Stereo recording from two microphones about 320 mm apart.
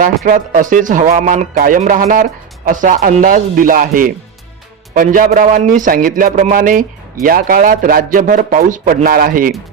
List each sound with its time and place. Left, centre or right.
0.3 s a man's voice: right